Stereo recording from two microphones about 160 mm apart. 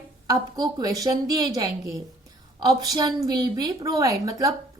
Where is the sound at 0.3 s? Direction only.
25° right (ahead or behind).